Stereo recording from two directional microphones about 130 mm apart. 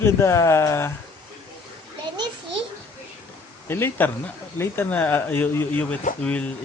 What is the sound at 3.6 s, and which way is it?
Speech, 20° left (ahead or behind).